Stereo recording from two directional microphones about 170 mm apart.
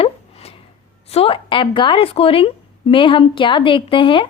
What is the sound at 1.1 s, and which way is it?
A woman's voice, 35° left (ahead or behind).